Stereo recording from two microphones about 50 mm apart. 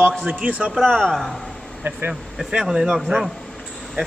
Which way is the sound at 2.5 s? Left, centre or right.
Centre.